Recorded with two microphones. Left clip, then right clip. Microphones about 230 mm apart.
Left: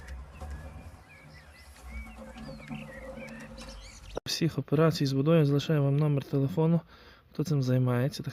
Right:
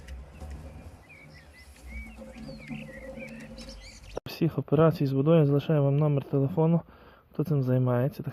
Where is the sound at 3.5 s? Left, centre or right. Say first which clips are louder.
Right 1 dB; centre.